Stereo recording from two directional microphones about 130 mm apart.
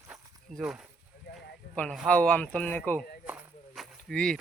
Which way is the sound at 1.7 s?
10° left (ahead or behind).